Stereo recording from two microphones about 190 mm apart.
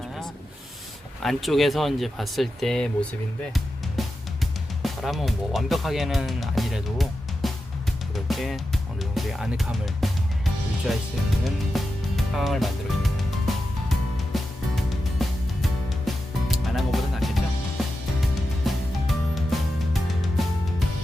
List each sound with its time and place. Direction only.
1.2 s speech: centre (ahead or behind)
4.0 s music: centre (ahead or behind)
4.8 s speech: centre (ahead or behind)
8.1 s music: centre (ahead or behind)
11.4 s speech: centre (ahead or behind)
13.5 s music: centre (ahead or behind)